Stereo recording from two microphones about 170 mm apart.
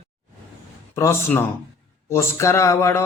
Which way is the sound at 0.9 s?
15° left (ahead or behind).